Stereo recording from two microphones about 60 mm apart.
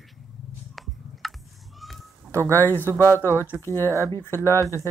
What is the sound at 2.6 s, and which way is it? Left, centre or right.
Speech, left.